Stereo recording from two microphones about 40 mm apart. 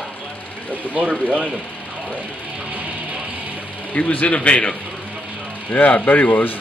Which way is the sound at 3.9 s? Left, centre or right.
Left.